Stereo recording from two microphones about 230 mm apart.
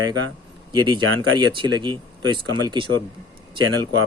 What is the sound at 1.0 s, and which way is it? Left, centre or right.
Speech, right.